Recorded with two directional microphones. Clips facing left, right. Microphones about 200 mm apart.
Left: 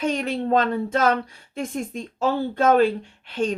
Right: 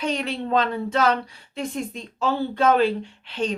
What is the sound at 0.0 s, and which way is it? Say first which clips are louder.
Speech: left 2 dB; 50° left (ahead or behind).